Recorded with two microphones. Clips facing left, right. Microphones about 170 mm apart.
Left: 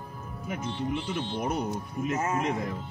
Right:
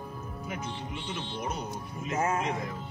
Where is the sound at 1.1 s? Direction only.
55° left (ahead or behind).